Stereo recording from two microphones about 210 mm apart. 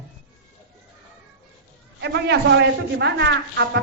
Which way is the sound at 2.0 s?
55° right (ahead or behind).